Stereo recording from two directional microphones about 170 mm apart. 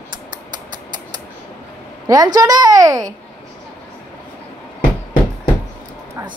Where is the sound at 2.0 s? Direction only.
20° right (ahead or behind).